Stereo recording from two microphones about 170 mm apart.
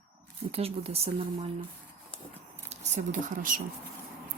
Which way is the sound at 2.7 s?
45° right (ahead or behind).